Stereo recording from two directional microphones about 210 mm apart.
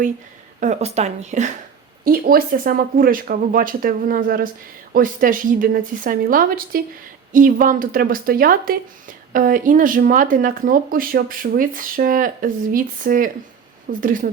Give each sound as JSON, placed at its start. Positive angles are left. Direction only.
{"t": 0.6, "sound": "speech", "side_deg": -30}